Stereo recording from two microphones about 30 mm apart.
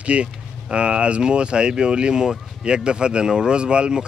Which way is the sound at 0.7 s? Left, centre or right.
Right.